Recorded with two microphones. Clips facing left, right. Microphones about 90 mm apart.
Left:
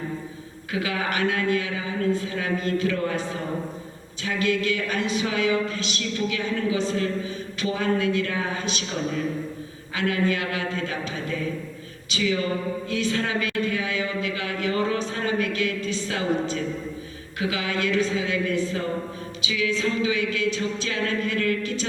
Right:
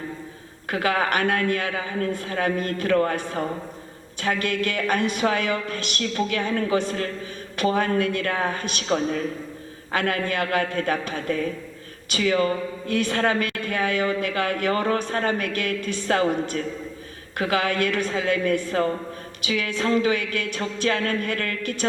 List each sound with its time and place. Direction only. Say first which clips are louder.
0.7 s a woman's voice: right 4 dB; 50° right (ahead or behind)